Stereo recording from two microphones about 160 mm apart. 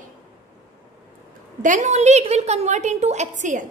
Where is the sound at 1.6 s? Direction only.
50° right (ahead or behind).